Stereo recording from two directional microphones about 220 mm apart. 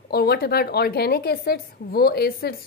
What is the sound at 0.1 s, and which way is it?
Speech, 45° left (ahead or behind).